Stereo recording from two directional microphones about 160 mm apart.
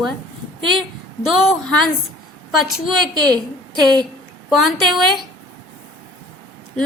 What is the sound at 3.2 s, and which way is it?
Speech, 25° right (ahead or behind).